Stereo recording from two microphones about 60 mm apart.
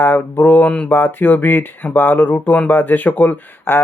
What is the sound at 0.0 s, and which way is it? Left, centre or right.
Speech, left.